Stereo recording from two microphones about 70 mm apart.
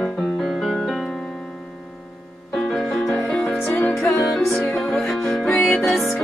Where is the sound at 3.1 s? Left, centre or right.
Centre.